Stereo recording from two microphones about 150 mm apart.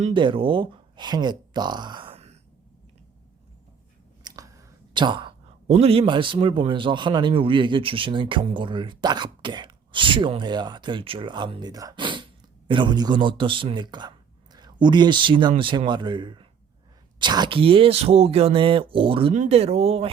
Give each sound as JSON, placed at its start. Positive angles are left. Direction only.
{"t": 0.1, "sound": "speech", "side_deg": -35}
{"t": 4.2, "sound": "chewing", "side_deg": -25}
{"t": 4.9, "sound": "a man's voice", "side_deg": -30}
{"t": 5.6, "sound": "a man's voice", "side_deg": -45}
{"t": 19.3, "sound": "speech", "side_deg": -50}